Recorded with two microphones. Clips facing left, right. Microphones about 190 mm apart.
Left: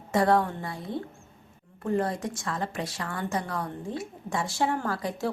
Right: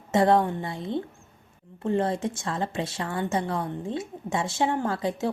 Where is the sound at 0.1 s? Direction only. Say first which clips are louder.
Right 2 dB; 25° right (ahead or behind).